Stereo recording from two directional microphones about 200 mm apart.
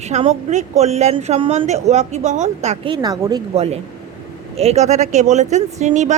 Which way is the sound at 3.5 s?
30° right (ahead or behind).